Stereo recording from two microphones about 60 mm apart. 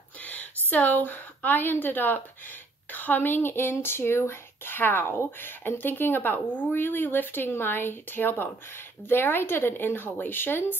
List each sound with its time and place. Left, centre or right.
0.2 s a woman's voice: left